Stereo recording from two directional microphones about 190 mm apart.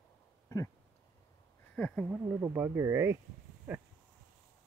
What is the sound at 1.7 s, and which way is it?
Speech, 10° left (ahead or behind).